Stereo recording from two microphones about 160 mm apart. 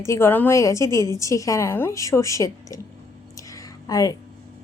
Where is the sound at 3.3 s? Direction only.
20° left (ahead or behind).